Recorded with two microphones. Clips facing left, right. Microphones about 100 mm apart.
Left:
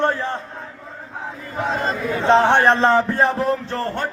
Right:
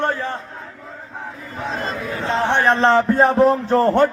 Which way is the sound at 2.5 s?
50° left (ahead or behind).